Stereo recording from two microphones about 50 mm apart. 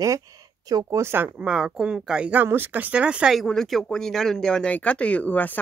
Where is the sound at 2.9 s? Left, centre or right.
Right.